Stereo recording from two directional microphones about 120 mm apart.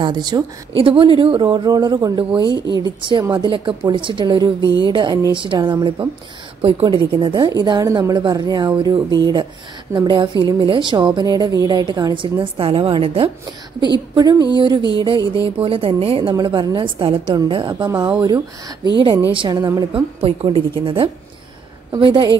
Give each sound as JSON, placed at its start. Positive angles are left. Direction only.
{"t": 0.0, "sound": "a woman's voice", "side_deg": -35}
{"t": 14.6, "sound": "a woman's voice", "side_deg": -40}
{"t": 16.3, "sound": "a woman's voice", "side_deg": -35}
{"t": 19.3, "sound": "a woman's voice", "side_deg": -40}
{"t": 19.9, "sound": "speech", "side_deg": -55}